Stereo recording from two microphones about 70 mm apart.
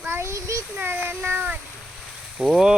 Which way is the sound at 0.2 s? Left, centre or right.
Right.